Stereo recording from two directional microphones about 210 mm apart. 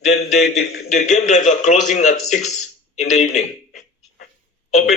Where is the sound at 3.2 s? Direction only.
35° left (ahead or behind).